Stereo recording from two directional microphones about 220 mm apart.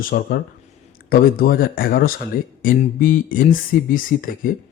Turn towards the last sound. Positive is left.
turn(degrees=40)  # may be behind; listen again after turning